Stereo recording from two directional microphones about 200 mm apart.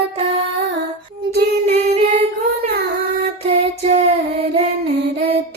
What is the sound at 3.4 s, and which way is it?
Music, 35° right (ahead or behind).